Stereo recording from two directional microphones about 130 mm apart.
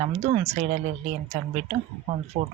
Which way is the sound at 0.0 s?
55° right (ahead or behind).